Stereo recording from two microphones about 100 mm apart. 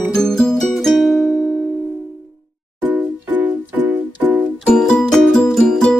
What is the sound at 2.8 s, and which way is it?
Music, 20° right (ahead or behind).